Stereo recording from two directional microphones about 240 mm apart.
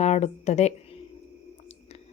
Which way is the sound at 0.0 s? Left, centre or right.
Left.